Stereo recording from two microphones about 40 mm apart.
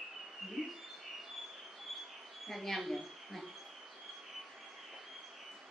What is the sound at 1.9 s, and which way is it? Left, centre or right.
Train, centre.